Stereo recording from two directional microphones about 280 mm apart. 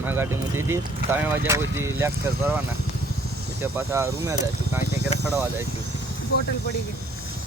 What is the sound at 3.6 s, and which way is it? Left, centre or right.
Speech, centre.